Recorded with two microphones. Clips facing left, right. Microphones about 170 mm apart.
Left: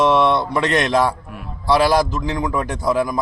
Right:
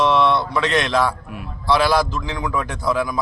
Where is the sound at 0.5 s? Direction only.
45° left (ahead or behind).